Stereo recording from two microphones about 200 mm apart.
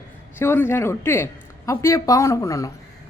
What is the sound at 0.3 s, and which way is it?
A woman's voice, 10° left (ahead or behind).